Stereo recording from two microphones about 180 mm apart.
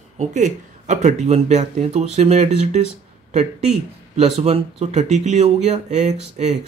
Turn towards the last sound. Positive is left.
turn(degrees=-40)  # may be behind; listen again after turning